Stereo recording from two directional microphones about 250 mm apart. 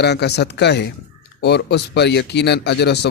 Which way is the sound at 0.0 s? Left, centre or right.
Left.